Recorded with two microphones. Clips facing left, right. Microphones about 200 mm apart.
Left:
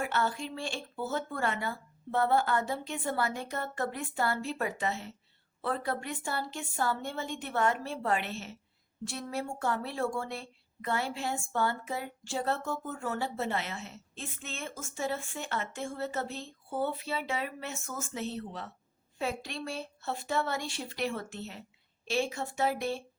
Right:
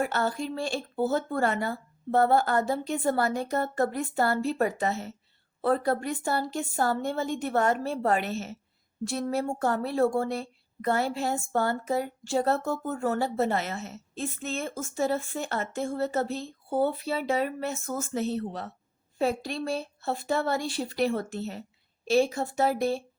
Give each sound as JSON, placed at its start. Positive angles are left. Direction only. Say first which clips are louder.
{"t": 0.0, "sound": "a woman's voice", "louder": "right 4 dB", "side_deg": -40}